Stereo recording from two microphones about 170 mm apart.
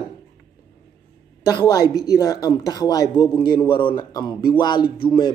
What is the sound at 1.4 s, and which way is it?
A man's voice, 20° left (ahead or behind).